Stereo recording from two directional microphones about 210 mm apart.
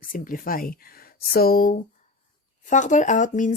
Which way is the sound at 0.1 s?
40° left (ahead or behind).